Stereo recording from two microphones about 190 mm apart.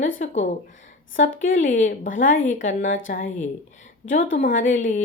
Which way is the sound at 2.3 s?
90° left.